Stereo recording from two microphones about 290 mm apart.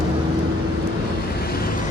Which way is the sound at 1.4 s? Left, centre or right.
Left.